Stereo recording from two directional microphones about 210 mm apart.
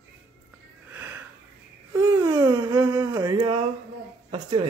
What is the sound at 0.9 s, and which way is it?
Sniff, 10° right (ahead or behind).